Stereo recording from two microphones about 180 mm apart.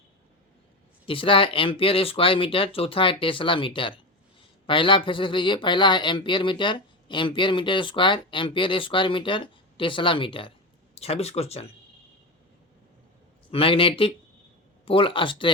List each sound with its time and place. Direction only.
1.0 s speech: 30° left (ahead or behind)
13.5 s speech: 30° left (ahead or behind)